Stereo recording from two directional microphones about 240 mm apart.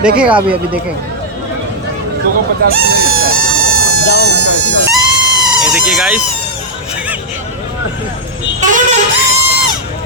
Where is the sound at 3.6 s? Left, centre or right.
Right.